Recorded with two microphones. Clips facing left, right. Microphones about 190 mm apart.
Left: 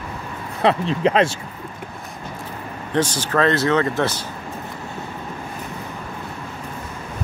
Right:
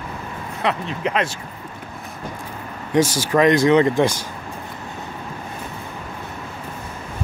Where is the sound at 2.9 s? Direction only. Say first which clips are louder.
Right 3 dB; 10° right (ahead or behind).